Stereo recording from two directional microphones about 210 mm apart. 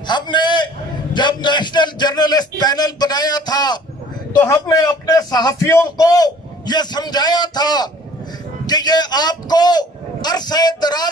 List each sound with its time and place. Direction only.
0.0 s speech: 20° left (ahead or behind)